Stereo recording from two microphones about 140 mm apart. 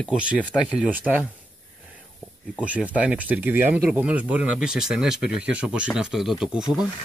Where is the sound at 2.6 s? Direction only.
10° right (ahead or behind).